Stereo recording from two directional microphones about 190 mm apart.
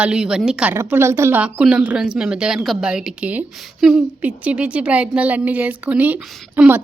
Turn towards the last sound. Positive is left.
turn(degrees=-10)  # may be behind; listen again after turning